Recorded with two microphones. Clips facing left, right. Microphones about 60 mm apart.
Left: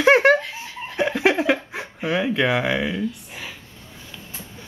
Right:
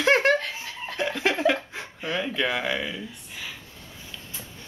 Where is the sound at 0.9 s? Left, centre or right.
Centre.